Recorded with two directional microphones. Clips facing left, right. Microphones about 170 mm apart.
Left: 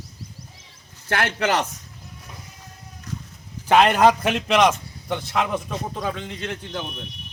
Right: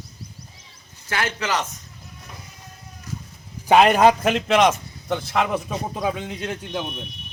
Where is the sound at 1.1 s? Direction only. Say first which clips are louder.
Left 3 dB; 60° left (ahead or behind).